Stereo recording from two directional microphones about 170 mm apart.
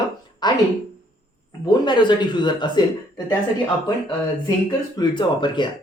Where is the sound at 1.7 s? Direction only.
25° left (ahead or behind).